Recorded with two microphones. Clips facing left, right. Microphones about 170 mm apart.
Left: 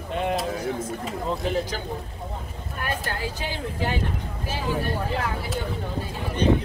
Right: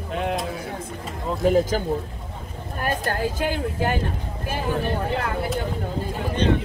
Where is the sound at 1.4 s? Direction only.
45° right (ahead or behind).